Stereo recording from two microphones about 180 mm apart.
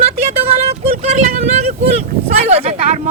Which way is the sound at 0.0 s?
35° right (ahead or behind).